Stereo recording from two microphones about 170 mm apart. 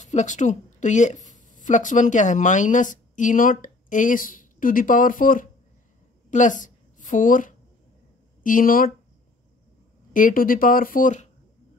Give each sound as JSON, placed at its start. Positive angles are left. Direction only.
{"t": 0.0, "sound": "a woman's voice", "side_deg": 45}
{"t": 10.1, "sound": "speech", "side_deg": 55}